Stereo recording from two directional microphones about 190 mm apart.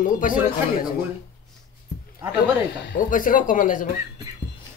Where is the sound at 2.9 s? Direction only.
45° left (ahead or behind).